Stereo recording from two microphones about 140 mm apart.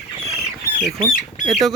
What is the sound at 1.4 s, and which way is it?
Speech, centre (ahead or behind).